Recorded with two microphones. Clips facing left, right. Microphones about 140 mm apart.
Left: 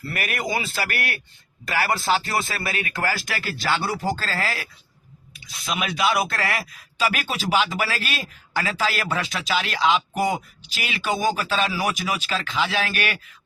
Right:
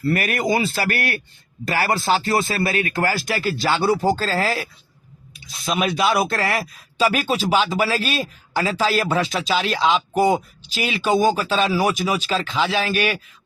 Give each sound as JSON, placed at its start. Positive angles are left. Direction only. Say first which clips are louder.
{"t": 0.1, "sound": "a man's voice", "louder": "right 6 dB", "side_deg": -35}